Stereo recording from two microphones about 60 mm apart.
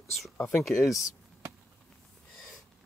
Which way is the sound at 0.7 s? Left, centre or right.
Left.